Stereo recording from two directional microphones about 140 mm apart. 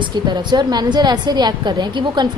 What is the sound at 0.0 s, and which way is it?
A woman's voice, 30° right (ahead or behind).